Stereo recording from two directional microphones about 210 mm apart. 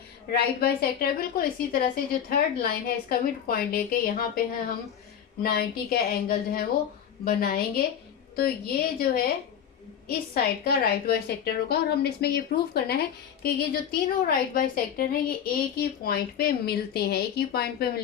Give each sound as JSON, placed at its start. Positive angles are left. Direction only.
{"t": 0.3, "sound": "a woman's voice", "side_deg": 45}